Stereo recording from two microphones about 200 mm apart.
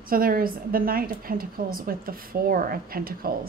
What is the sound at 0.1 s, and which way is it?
A woman's voice, 45° right (ahead or behind).